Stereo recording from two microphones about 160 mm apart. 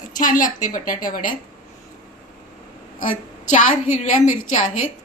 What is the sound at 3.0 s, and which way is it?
A woman's voice, 50° left (ahead or behind).